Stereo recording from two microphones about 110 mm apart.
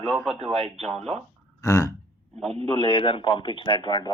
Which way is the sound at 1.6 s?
30° left (ahead or behind).